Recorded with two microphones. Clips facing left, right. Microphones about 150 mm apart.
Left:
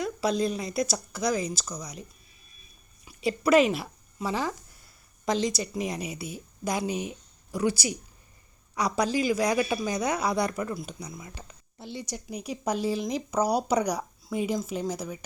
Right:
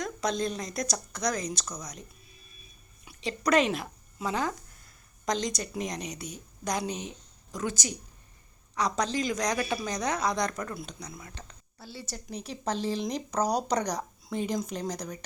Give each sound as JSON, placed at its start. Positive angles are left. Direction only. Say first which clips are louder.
{"t": 0.0, "sound": "speech", "louder": "left 4 dB", "side_deg": 5}
{"t": 3.0, "sound": "a sound", "louder": "left 2 dB", "side_deg": 0}
{"t": 3.2, "sound": "a woman's voice", "louder": "left 4 dB", "side_deg": 5}
{"t": 11.8, "sound": "a woman's voice", "louder": "left 5 dB", "side_deg": 20}